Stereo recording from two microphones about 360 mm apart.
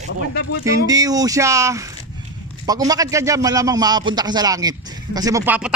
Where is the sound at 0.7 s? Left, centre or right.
Centre.